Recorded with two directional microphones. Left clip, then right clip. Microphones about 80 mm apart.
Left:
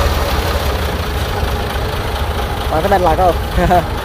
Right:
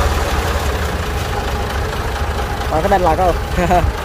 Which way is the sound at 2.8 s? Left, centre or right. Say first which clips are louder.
Left 2 dB; centre.